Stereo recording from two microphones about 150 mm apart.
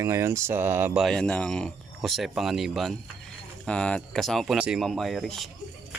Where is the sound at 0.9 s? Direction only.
5° left (ahead or behind).